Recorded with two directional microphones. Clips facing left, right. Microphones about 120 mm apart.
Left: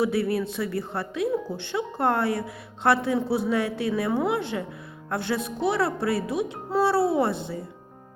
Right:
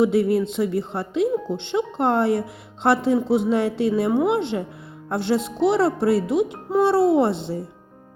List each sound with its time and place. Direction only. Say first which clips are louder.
0.0 s speech: right 6 dB; 20° right (ahead or behind)